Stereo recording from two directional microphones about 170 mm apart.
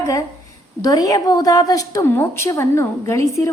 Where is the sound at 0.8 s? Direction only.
20° left (ahead or behind).